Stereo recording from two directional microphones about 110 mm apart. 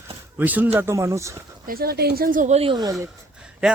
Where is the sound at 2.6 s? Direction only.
40° right (ahead or behind).